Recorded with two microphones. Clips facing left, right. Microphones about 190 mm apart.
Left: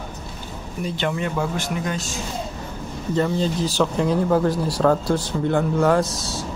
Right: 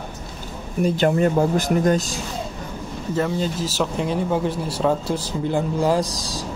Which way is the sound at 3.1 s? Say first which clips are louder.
Left 2 dB; 5° right (ahead or behind).